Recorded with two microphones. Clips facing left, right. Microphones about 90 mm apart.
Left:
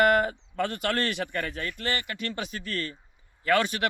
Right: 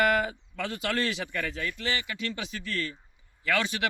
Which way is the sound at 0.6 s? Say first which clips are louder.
Left 2 dB; 50° left (ahead or behind).